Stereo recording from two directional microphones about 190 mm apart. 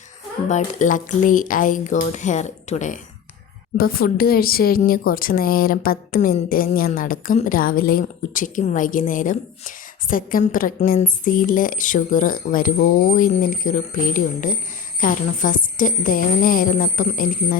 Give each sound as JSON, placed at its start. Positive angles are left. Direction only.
{"t": 0.4, "sound": "speech", "side_deg": 40}
{"t": 3.8, "sound": "speech", "side_deg": 50}